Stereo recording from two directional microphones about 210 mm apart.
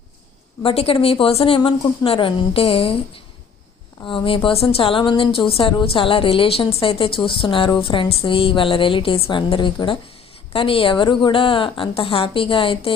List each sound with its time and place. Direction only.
0.6 s a woman's voice: 30° left (ahead or behind)
4.0 s a woman's voice: 25° left (ahead or behind)